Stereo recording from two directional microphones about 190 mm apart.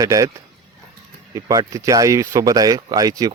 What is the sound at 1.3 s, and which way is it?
Speech, 15° right (ahead or behind).